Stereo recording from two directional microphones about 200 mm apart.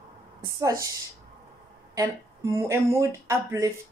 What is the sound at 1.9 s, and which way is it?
Speech, 15° right (ahead or behind).